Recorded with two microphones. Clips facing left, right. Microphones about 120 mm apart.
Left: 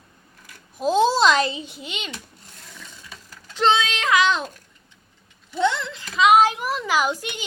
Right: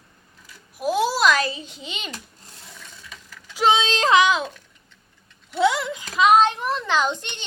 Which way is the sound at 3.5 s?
10° right (ahead or behind).